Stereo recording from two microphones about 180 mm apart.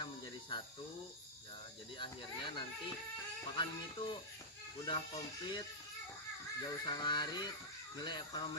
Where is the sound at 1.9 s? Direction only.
25° left (ahead or behind).